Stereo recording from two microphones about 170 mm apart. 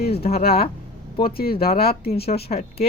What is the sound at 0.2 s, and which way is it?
Speech, 40° left (ahead or behind).